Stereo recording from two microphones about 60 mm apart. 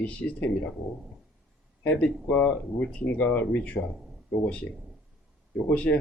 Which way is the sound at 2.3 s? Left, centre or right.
Left.